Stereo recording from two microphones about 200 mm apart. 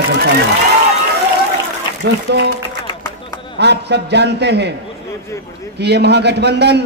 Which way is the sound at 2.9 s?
20° left (ahead or behind).